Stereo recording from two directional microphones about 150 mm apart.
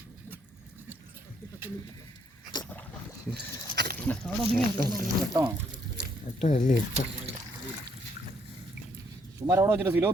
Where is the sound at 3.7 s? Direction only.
90° right.